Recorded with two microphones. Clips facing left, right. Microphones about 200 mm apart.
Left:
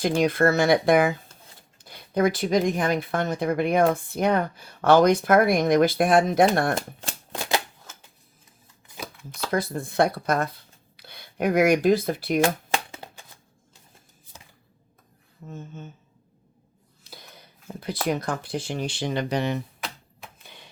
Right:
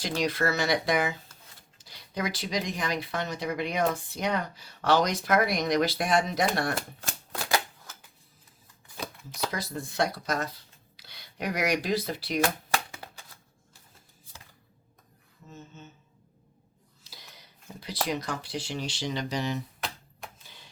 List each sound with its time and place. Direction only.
0.0 s speech: 55° left (ahead or behind)
7.3 s typewriter: 20° left (ahead or behind)
9.0 s shuffling cards: centre (ahead or behind)
9.5 s speech: 55° left (ahead or behind)
12.7 s a sound: 20° left (ahead or behind)
15.4 s speech: 50° left (ahead or behind)
17.0 s a sound: 55° left (ahead or behind)
18.0 s speech: 50° left (ahead or behind)
20.4 s a sound: 60° left (ahead or behind)